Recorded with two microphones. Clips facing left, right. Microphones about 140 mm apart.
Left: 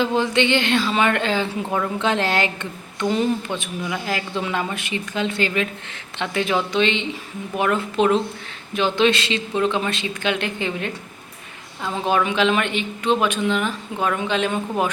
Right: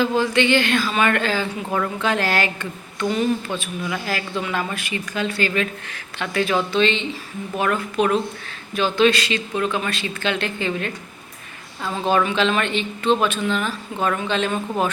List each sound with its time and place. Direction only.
0.0 s a woman's voice: 20° left (ahead or behind)